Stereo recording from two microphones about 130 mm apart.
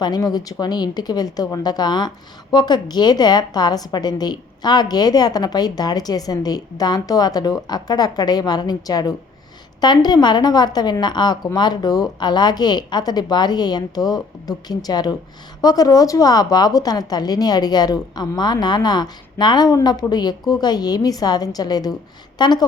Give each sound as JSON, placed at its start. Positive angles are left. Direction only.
{"t": 0.0, "sound": "a woman's voice", "side_deg": 30}